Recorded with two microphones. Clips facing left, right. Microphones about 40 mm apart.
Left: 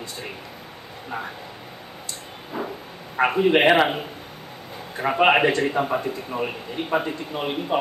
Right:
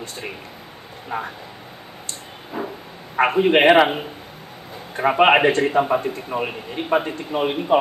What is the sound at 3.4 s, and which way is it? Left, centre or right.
Speech, right.